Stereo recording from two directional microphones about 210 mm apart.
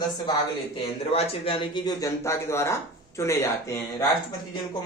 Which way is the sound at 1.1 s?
30° left (ahead or behind).